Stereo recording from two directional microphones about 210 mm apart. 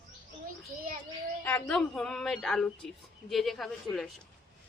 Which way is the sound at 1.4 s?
10° left (ahead or behind).